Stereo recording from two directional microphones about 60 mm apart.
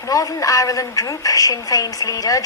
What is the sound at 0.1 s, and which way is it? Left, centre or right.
A woman's voice, left.